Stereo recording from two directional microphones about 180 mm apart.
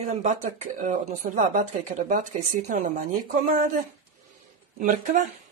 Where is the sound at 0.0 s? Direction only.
40° right (ahead or behind).